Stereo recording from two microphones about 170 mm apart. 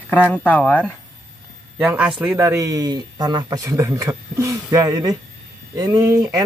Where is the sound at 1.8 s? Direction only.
5° right (ahead or behind).